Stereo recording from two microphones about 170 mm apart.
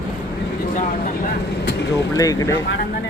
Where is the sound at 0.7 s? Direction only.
50° left (ahead or behind).